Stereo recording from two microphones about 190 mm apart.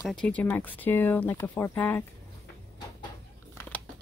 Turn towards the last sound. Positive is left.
turn(degrees=10)  # may be behind; listen again after turning